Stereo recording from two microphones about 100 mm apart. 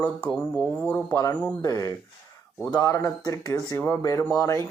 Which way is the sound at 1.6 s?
35° left (ahead or behind).